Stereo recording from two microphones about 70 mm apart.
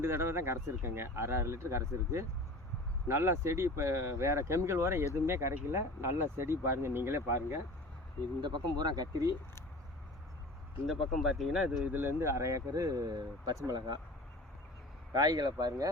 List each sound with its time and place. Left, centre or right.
0.0 s speech: right
8.4 s speech: right
10.8 s speech: centre
11.9 s speech: right
12.2 s speech: right
15.1 s speech: right